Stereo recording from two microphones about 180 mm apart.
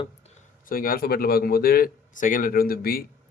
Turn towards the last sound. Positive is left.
turn(degrees=55)  # may be behind; listen again after turning